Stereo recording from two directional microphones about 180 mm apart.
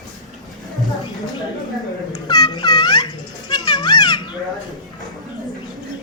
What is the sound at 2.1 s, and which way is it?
Music, 20° left (ahead or behind).